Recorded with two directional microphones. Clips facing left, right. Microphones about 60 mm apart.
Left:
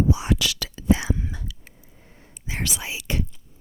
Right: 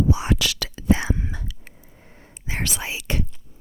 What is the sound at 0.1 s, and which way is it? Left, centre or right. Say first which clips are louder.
Whispering: right 1 dB; right.